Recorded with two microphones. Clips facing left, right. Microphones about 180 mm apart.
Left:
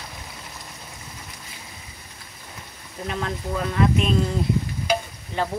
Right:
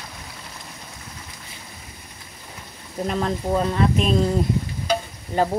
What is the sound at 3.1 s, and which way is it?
Speech, 35° right (ahead or behind).